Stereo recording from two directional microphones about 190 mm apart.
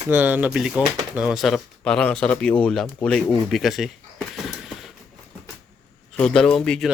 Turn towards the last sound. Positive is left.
turn(degrees=5)  # may be behind; listen again after turning